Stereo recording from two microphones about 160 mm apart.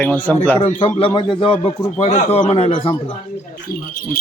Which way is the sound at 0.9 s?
35° left (ahead or behind).